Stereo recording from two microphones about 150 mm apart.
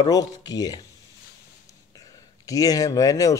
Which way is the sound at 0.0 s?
25° left (ahead or behind).